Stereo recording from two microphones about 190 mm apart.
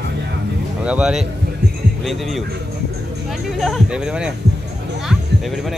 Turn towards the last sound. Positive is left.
turn(degrees=0)  # may be behind; listen again after turning